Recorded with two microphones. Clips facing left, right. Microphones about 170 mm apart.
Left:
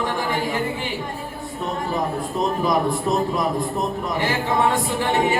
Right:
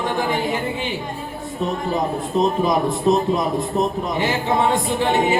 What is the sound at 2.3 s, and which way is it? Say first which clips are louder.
Speech: right 3 dB; 20° right (ahead or behind).